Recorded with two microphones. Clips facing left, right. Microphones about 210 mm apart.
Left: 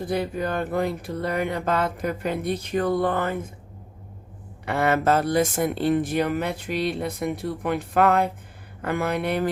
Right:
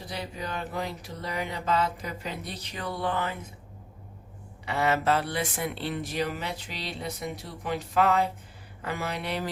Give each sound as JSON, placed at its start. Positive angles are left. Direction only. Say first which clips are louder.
{"t": 0.0, "sound": "speech", "louder": "left 10 dB", "side_deg": 55}
{"t": 4.6, "sound": "speech", "louder": "left 4 dB", "side_deg": 55}